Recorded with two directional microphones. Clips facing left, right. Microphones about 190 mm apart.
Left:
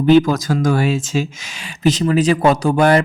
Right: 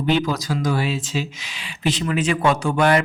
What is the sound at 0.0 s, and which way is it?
Speech, 45° left (ahead or behind).